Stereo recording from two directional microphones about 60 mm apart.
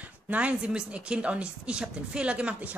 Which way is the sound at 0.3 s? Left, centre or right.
Right.